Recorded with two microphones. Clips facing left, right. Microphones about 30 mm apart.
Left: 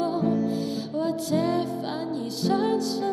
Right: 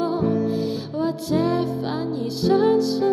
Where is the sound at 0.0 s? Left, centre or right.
Right.